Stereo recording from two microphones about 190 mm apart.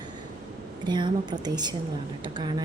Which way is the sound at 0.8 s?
25° right (ahead or behind).